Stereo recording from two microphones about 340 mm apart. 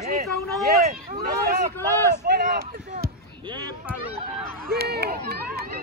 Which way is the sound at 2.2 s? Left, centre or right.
Right.